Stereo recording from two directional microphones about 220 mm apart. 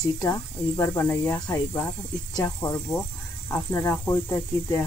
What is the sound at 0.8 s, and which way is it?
Speech, 10° left (ahead or behind).